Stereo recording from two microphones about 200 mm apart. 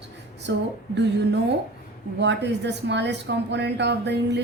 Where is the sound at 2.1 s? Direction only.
60° right (ahead or behind).